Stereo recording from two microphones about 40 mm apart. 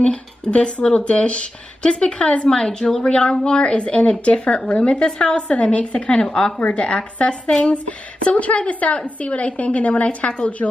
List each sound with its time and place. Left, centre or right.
0.5 s speech: left
6.2 s speech: centre
6.7 s a woman's voice: left
10.6 s speech: left